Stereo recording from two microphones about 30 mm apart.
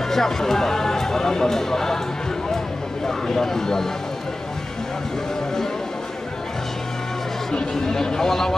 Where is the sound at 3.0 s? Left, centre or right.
Centre.